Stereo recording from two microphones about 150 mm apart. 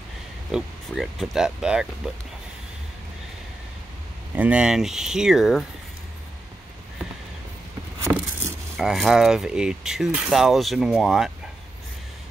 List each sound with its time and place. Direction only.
0.5 s speech: 5° right (ahead or behind)
4.4 s speech: 5° right (ahead or behind)
8.0 s vehicle: 20° right (ahead or behind)
8.7 s speech: centre (ahead or behind)